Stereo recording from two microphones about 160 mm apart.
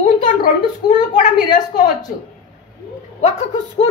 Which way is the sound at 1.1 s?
50° left (ahead or behind).